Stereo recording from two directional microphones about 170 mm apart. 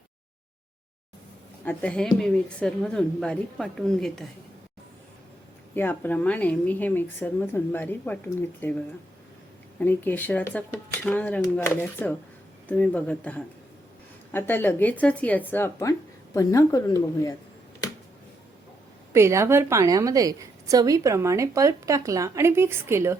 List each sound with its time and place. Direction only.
1.6 s a woman's voice: 5° left (ahead or behind)
5.7 s speech: 10° left (ahead or behind)
9.8 s speech: 10° left (ahead or behind)
19.1 s a woman's voice: 15° right (ahead or behind)